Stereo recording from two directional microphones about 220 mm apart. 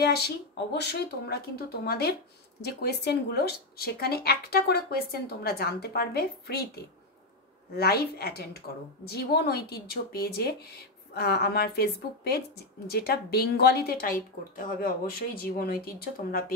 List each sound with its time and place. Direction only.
0.0 s a woman's voice: 45° left (ahead or behind)